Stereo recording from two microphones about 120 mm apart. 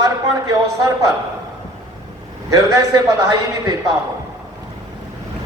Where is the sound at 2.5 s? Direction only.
30° right (ahead or behind).